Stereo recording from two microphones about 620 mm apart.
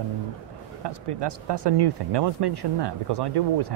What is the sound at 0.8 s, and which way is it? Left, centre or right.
Speech, right.